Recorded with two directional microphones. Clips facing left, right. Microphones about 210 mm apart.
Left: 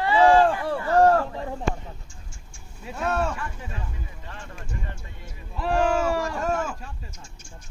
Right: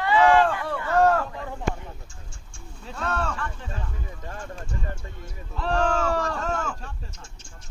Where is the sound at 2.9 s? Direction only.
10° left (ahead or behind).